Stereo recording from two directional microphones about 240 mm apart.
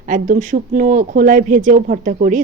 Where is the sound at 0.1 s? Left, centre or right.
Right.